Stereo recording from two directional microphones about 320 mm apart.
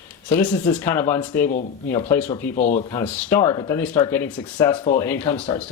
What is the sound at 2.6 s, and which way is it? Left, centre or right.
Speech, left.